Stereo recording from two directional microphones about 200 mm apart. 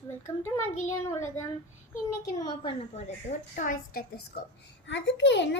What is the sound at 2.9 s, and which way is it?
A woman's voice, 35° left (ahead or behind).